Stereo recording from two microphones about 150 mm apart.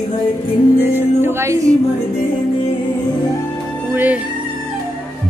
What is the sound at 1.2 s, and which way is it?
Music, 20° right (ahead or behind).